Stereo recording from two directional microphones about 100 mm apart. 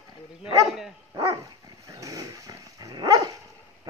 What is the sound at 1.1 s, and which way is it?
Dog, 30° right (ahead or behind).